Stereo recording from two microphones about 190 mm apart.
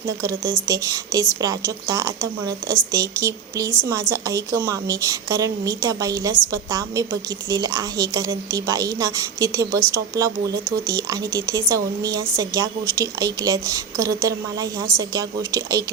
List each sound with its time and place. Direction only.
0.2 s a woman's voice: 15° right (ahead or behind)